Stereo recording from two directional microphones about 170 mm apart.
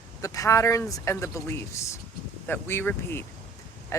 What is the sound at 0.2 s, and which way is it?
Speech, 20° left (ahead or behind).